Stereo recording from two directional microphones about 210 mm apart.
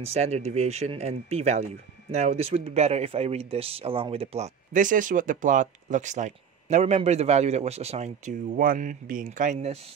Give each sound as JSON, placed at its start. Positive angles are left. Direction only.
{"t": 0.0, "sound": "speech", "side_deg": -30}